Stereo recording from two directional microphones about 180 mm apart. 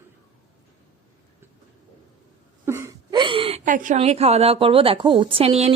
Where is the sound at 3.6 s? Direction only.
45° right (ahead or behind).